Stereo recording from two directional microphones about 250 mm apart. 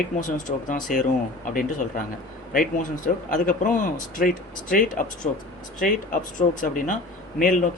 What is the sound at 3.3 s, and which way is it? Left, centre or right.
Speech, left.